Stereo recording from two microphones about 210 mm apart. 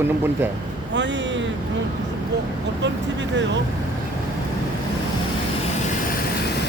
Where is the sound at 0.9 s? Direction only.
60° right (ahead or behind).